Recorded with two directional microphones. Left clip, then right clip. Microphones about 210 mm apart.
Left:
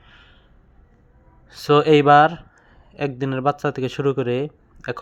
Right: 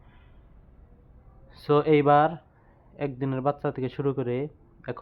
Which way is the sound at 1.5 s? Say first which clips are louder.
Left 7 dB; 20° left (ahead or behind).